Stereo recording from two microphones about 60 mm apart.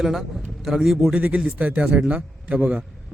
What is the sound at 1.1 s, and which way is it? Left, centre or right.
A man's voice, right.